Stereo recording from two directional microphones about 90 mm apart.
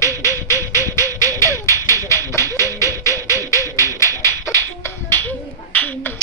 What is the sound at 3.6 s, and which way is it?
Music, 35° left (ahead or behind).